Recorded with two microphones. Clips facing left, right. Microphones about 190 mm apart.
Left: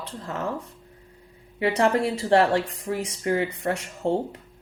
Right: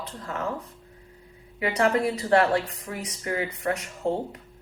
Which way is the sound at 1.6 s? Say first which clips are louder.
Left 2 dB; 30° left (ahead or behind).